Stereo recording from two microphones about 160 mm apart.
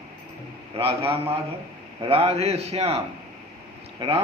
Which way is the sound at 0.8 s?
35° right (ahead or behind).